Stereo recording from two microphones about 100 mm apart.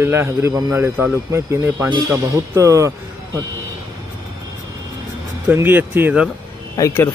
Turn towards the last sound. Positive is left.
turn(degrees=30)  # may be behind; listen again after turning